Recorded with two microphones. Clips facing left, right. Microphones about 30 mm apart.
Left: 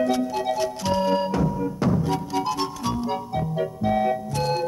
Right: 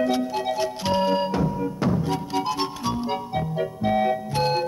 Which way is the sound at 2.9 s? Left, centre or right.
Right.